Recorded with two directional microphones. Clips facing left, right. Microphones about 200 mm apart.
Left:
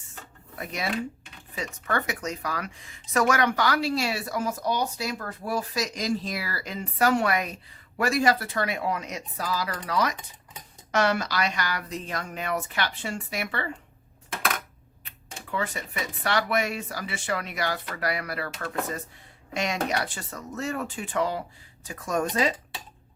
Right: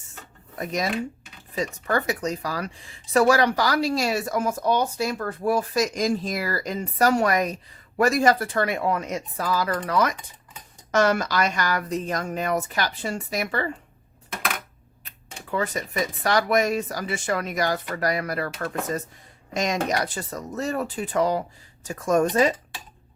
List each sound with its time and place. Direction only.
0.6 s a woman's voice: 40° right (ahead or behind)
15.5 s a woman's voice: 40° right (ahead or behind)